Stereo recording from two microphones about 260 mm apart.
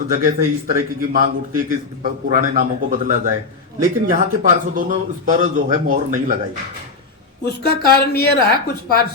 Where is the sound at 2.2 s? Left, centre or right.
Right.